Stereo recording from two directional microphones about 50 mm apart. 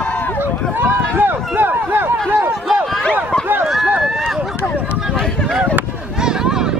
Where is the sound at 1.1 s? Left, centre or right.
Right.